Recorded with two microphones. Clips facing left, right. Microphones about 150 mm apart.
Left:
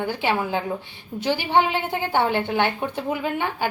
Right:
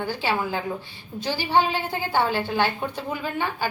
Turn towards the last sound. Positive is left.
turn(degrees=20)  # may be behind; listen again after turning